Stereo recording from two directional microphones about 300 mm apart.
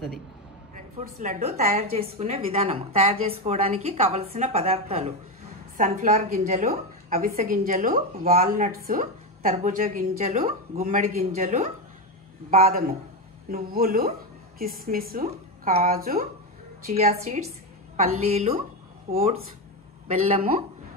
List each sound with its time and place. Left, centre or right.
1.2 s a woman's voice: right
20.1 s a woman's voice: right